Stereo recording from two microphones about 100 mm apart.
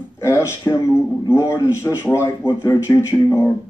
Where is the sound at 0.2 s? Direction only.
30° left (ahead or behind).